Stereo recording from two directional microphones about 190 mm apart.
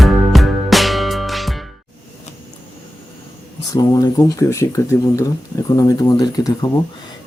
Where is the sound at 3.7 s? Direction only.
20° left (ahead or behind).